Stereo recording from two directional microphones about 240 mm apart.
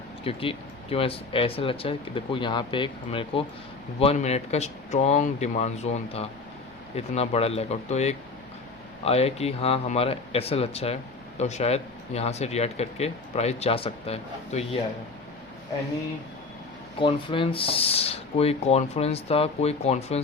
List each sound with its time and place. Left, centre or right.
0.3 s speech: left
17.0 s speech: left